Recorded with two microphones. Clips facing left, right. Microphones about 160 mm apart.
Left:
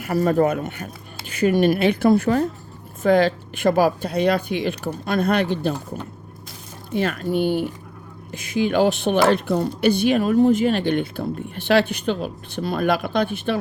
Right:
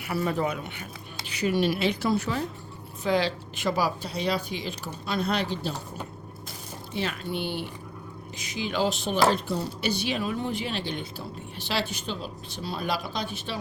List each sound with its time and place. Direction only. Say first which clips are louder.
0.0 s a woman's voice: left 9 dB; 45° left (ahead or behind)
6.9 s a woman's voice: left 9 dB; 50° left (ahead or behind)